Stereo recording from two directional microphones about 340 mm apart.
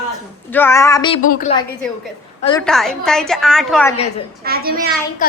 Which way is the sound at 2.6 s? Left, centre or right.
Centre.